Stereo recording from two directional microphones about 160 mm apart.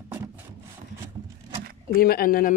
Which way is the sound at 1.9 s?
65° left (ahead or behind).